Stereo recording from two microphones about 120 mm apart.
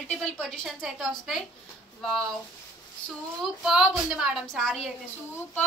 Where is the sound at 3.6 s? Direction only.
5° right (ahead or behind).